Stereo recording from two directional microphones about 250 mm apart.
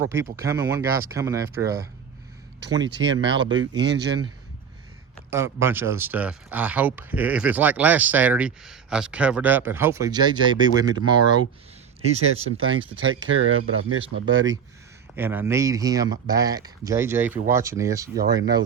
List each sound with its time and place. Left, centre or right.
0.0 s speech: centre
3.0 s speech: right
5.3 s speech: centre
12.5 s speech: right
14.0 s speech: centre